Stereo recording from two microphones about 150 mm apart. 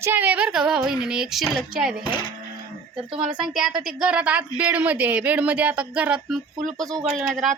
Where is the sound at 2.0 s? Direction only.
35° left (ahead or behind).